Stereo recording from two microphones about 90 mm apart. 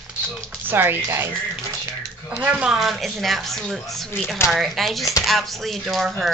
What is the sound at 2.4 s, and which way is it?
Speech, 15° right (ahead or behind).